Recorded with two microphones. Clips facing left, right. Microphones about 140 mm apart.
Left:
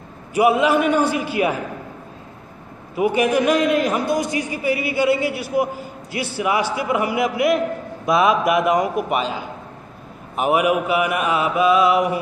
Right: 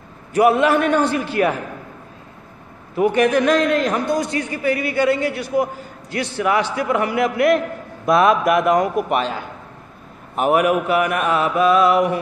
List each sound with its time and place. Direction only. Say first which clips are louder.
0.3 s a man's voice: right 1 dB; 5° left (ahead or behind)
3.0 s a man's voice: right 2 dB; 5° left (ahead or behind)
8.9 s mantra: right 1 dB; 5° left (ahead or behind)